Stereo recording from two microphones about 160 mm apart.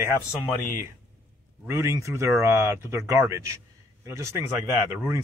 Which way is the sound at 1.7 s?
15° right (ahead or behind).